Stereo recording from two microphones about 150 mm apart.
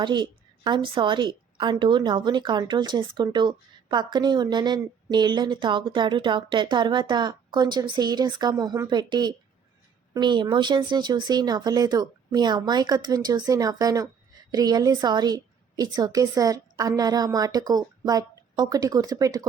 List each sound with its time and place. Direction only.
0.0 s a woman's voice: 30° right (ahead or behind)